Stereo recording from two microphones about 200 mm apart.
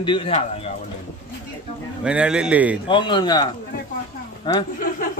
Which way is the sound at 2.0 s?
5° right (ahead or behind).